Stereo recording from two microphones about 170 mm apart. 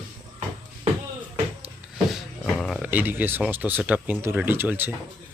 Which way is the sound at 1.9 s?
Centre (ahead or behind).